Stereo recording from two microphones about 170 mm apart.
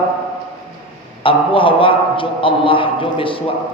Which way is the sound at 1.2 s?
30° left (ahead or behind).